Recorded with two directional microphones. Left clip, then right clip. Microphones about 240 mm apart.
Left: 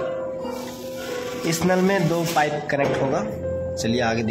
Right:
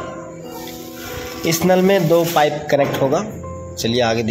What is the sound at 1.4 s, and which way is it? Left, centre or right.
A man's voice, centre.